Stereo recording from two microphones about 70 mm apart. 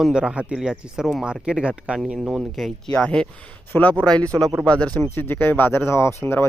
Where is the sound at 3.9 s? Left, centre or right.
Right.